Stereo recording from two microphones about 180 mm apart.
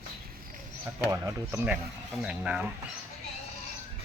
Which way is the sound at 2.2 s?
5° right (ahead or behind).